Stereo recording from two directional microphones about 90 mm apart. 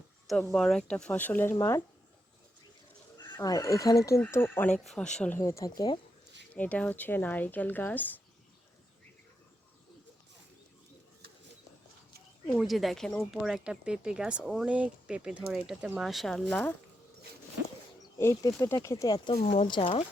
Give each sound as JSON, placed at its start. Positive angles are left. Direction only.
{"t": 0.4, "sound": "speech", "side_deg": 5}
{"t": 3.4, "sound": "speech", "side_deg": 40}
{"t": 4.3, "sound": "speech", "side_deg": 25}
{"t": 4.7, "sound": "speech", "side_deg": 5}
{"t": 5.3, "sound": "speech", "side_deg": 30}
{"t": 6.5, "sound": "speech", "side_deg": 15}
{"t": 12.6, "sound": "speech", "side_deg": 0}
{"t": 13.4, "sound": "speech", "side_deg": -10}
{"t": 18.2, "sound": "speech", "side_deg": 35}
{"t": 19.0, "sound": "speech", "side_deg": 50}
{"t": 19.3, "sound": "speech", "side_deg": 85}